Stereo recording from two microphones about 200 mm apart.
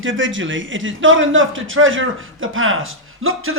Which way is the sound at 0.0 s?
75° right (ahead or behind).